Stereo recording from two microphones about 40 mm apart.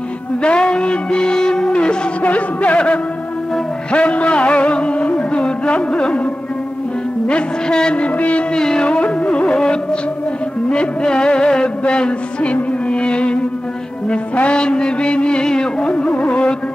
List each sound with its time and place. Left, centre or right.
0.4 s music: left
2.2 s speech: left
3.9 s music: left
7.2 s music: left
8.5 s music: centre
10.7 s music: left
15.9 s music: left